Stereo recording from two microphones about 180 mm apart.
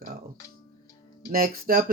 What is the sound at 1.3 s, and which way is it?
Speech, 55° right (ahead or behind).